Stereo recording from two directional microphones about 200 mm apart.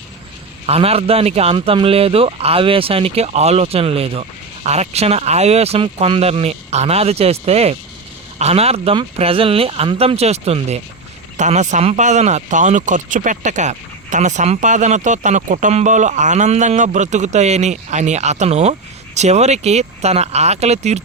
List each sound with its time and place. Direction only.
0.7 s speech: 30° right (ahead or behind)